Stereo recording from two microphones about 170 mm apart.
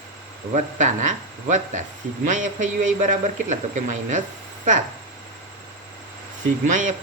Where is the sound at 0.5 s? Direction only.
45° right (ahead or behind).